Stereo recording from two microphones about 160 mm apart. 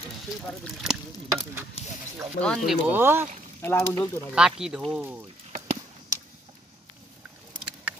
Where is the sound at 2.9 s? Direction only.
15° right (ahead or behind).